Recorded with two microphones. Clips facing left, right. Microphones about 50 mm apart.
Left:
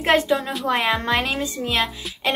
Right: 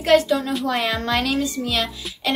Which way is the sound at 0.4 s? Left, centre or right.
Centre.